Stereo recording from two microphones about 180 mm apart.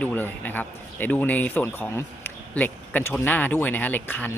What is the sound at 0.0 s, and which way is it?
Speech, 10° left (ahead or behind).